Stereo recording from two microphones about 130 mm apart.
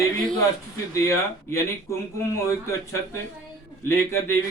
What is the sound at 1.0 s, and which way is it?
Speech, 20° left (ahead or behind).